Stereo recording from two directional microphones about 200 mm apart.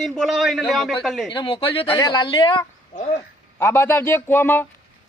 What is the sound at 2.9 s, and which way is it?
Speech, 35° left (ahead or behind).